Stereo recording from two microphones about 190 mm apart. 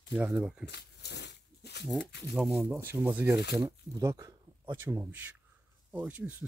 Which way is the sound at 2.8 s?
10° right (ahead or behind).